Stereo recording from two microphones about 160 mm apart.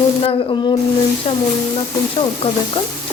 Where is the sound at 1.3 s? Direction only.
35° left (ahead or behind).